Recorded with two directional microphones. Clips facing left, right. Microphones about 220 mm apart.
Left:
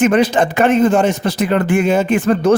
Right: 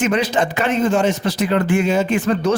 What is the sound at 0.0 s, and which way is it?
A man's voice, 50° left (ahead or behind).